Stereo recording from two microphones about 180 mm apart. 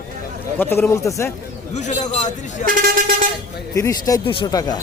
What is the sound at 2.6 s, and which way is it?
Vehicle, 50° right (ahead or behind).